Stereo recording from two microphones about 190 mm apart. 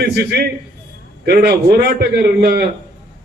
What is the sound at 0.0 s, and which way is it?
A man's voice, 55° right (ahead or behind).